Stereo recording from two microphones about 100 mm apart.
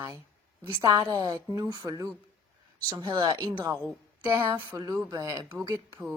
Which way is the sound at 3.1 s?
45° right (ahead or behind).